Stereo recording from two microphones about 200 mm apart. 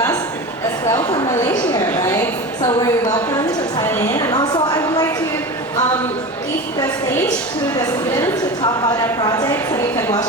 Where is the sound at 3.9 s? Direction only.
15° left (ahead or behind).